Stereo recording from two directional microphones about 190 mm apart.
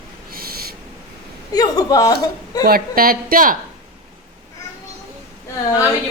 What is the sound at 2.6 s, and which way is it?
Speech, 50° right (ahead or behind).